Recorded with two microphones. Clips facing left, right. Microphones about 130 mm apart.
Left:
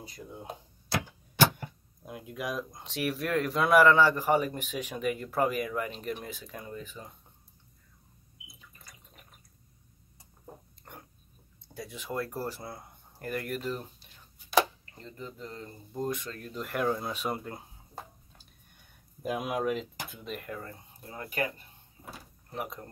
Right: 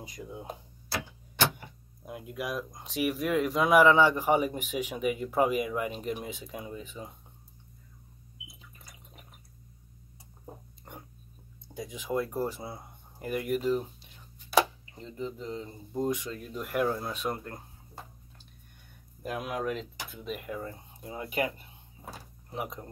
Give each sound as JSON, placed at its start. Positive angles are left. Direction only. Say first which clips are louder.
{"t": 0.0, "sound": "a man's voice", "louder": "right 3 dB", "side_deg": -15}
{"t": 0.4, "sound": "tick-tock", "louder": "right 1 dB", "side_deg": 0}
{"t": 2.0, "sound": "a man's voice", "louder": "even", "side_deg": -5}
{"t": 10.4, "sound": "a sound", "louder": "right 2 dB", "side_deg": -15}
{"t": 11.7, "sound": "a man's voice", "louder": "right 4 dB", "side_deg": -15}
{"t": 19.2, "sound": "speech", "louder": "left 2 dB", "side_deg": 10}
{"t": 20.2, "sound": "a man's voice", "louder": "right 4 dB", "side_deg": -10}
{"t": 22.5, "sound": "a man's voice", "louder": "right 1 dB", "side_deg": -15}